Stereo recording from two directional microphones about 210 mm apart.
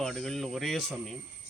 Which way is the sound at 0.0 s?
Centre (ahead or behind).